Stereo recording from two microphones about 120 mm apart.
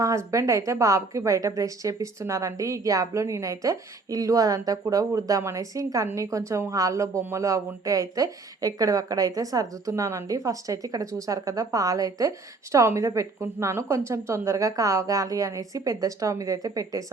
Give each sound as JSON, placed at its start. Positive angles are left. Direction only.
{"t": 0.0, "sound": "speech", "side_deg": -25}